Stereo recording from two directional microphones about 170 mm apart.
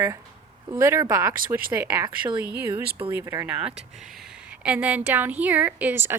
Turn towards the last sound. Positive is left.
turn(degrees=-15)  # may be behind; listen again after turning